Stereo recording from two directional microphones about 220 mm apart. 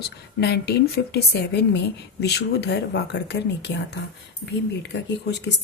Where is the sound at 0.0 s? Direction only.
50° left (ahead or behind).